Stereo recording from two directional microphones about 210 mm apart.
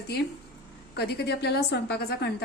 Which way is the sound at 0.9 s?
50° left (ahead or behind).